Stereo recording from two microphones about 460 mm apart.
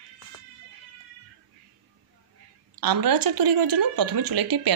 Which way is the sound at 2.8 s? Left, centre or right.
Right.